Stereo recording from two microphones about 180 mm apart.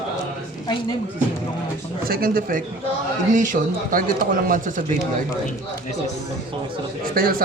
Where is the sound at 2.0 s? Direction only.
55° right (ahead or behind).